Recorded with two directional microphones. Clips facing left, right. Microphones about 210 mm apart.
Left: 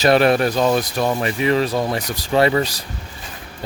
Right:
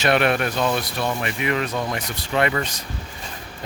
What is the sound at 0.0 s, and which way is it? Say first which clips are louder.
Speech: left 5 dB; 35° left (ahead or behind).